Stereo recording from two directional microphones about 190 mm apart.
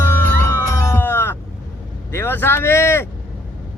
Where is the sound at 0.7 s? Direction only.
15° left (ahead or behind).